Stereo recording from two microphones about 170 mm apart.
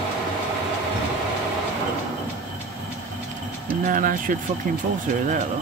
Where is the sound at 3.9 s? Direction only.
50° right (ahead or behind).